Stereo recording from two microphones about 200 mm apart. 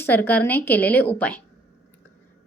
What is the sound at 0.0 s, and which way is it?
A woman's voice, 10° left (ahead or behind).